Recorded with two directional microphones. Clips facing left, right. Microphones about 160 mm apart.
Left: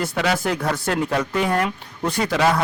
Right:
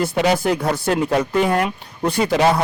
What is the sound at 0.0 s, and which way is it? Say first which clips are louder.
A man's voice: right 4 dB; 30° right (ahead or behind).